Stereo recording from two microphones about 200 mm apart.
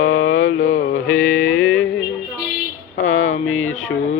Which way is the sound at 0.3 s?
90° left.